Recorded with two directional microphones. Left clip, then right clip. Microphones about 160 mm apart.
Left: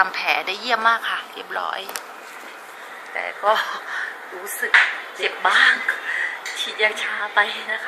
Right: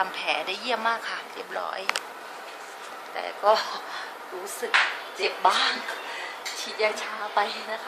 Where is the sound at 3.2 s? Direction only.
15° right (ahead or behind).